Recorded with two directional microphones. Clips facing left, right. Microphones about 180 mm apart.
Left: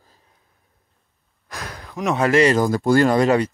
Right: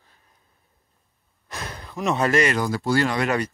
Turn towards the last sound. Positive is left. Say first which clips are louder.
# left 6 dB
turn(degrees=45)  # may be behind; listen again after turning